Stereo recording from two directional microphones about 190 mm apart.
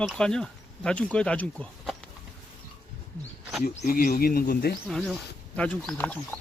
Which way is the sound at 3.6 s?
50° left (ahead or behind).